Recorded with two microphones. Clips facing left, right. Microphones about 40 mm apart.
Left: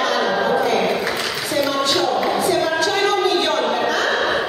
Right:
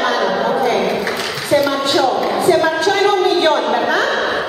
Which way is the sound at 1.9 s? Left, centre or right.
Centre.